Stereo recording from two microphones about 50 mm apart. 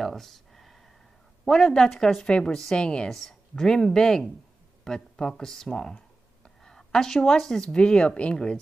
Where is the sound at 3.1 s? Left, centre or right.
Centre.